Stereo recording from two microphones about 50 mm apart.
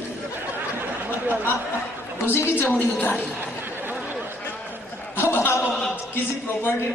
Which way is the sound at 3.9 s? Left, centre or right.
Right.